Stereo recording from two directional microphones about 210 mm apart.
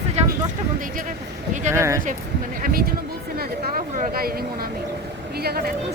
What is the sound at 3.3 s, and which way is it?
Speech, 40° right (ahead or behind).